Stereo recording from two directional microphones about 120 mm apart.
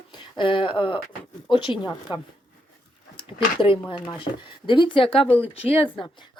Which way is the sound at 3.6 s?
45° left (ahead or behind).